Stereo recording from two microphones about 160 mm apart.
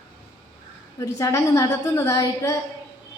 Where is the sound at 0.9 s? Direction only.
20° left (ahead or behind).